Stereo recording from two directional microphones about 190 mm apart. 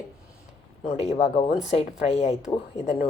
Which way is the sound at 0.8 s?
35° left (ahead or behind).